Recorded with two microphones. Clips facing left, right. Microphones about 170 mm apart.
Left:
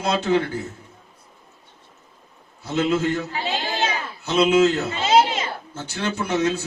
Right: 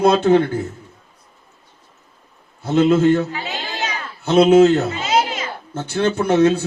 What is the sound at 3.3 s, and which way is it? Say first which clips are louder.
Children playing: left 1 dB; 30° left (ahead or behind).